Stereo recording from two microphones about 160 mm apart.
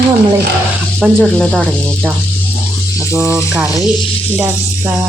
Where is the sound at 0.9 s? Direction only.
5° left (ahead or behind).